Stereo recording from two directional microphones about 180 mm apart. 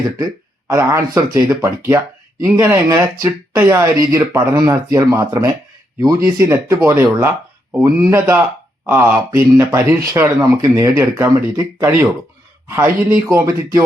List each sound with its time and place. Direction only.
0.7 s speech: 15° right (ahead or behind)